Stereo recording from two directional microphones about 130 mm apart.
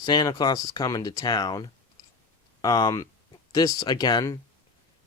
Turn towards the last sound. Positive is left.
turn(degrees=30)  # may be behind; listen again after turning